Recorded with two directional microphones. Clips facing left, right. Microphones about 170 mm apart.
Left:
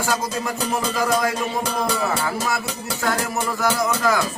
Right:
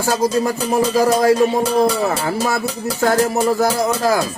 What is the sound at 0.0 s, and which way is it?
Music, 35° right (ahead or behind).